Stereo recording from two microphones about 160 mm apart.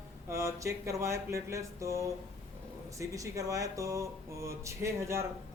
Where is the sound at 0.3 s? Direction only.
20° right (ahead or behind).